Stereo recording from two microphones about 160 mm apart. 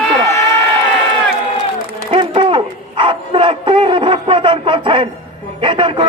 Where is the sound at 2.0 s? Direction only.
35° right (ahead or behind).